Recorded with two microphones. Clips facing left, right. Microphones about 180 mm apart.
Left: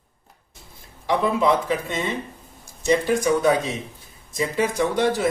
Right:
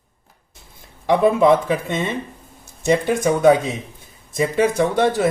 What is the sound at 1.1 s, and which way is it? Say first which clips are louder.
Speech: right 6 dB; 55° right (ahead or behind).